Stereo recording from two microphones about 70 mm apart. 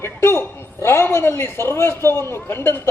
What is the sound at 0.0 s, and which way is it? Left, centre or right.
A woman's voice, left.